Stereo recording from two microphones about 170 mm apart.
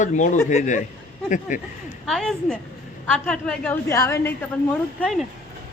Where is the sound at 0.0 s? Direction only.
45° left (ahead or behind).